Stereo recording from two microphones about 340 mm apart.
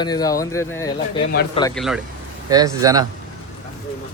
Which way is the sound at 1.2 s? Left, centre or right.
Left.